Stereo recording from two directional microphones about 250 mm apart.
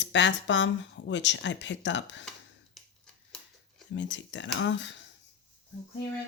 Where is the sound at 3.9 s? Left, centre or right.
Left.